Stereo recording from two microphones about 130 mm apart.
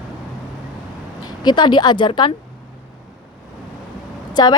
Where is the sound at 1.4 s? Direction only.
35° left (ahead or behind).